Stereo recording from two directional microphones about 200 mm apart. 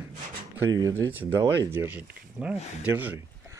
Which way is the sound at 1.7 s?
10° right (ahead or behind).